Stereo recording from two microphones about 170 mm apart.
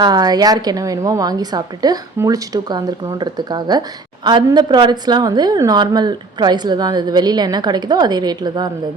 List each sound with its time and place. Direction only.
0.0 s a woman's voice: 25° right (ahead or behind)